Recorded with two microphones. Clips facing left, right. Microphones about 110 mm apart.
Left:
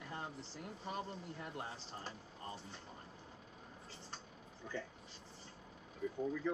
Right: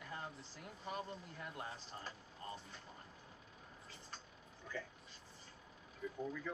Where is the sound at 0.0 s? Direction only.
30° left (ahead or behind).